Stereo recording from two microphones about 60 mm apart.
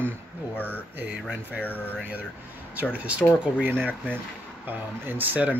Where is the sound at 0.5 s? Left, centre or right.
Left.